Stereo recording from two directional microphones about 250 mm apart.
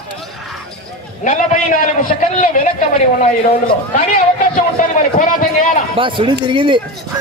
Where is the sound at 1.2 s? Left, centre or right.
Left.